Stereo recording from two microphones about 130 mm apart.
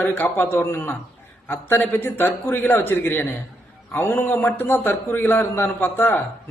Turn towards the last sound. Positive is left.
turn(degrees=15)  # may be behind; listen again after turning